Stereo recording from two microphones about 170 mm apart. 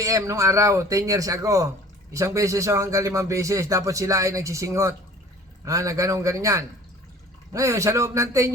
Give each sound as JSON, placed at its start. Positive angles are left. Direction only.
{"t": 0.0, "sound": "speech", "side_deg": -20}